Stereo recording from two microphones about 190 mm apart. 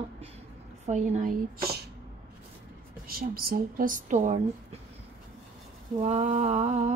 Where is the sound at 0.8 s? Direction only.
40° right (ahead or behind); by 1.9 s 55° right (ahead or behind).